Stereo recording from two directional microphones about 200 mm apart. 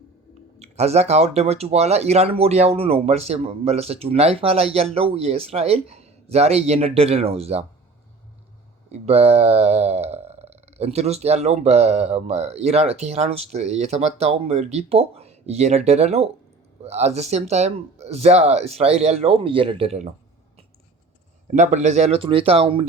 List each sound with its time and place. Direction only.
0.6 s speech: 35° right (ahead or behind)
8.9 s speech: 30° right (ahead or behind)
21.4 s speech: 35° right (ahead or behind)